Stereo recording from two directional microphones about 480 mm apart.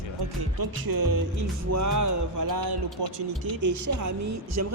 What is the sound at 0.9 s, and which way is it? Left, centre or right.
Music, right.